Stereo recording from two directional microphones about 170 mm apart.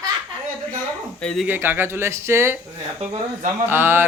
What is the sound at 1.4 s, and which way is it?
Speech, 10° right (ahead or behind).